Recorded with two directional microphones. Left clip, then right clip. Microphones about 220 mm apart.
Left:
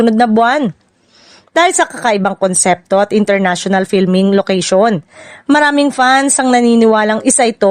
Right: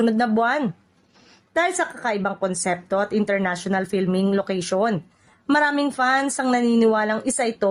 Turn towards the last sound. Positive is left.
turn(degrees=40)  # may be behind; listen again after turning